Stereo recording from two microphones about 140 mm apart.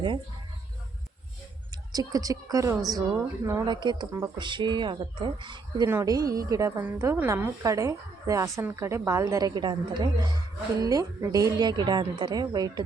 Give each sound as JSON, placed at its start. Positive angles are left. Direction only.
{"t": 1.9, "sound": "a woman's voice", "side_deg": -25}
{"t": 3.7, "sound": "a woman's voice", "side_deg": -30}